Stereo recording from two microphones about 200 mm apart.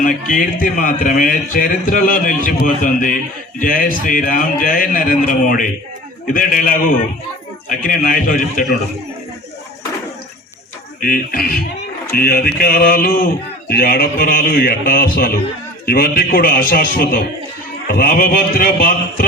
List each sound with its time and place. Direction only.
0.0 s a man's voice: 40° left (ahead or behind)
11.0 s a man's voice: 45° left (ahead or behind)